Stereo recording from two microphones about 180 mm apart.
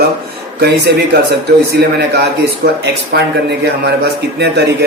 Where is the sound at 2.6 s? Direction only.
65° right (ahead or behind).